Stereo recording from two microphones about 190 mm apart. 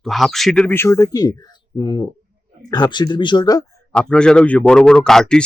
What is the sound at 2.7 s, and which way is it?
Speech, 20° left (ahead or behind).